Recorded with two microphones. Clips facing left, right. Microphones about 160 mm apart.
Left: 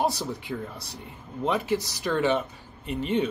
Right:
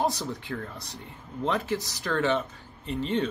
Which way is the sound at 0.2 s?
15° left (ahead or behind).